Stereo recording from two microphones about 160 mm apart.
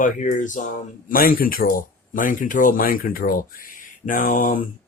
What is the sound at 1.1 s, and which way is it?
Speech, 65° left (ahead or behind).